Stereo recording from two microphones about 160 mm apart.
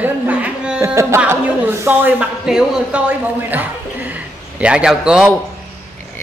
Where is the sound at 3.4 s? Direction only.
10° right (ahead or behind).